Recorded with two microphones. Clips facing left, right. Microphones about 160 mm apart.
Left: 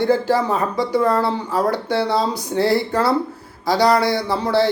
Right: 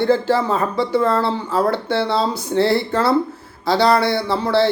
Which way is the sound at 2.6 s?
25° right (ahead or behind).